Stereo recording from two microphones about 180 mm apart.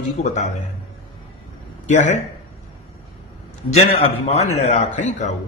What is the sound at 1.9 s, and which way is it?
Speech, 40° left (ahead or behind).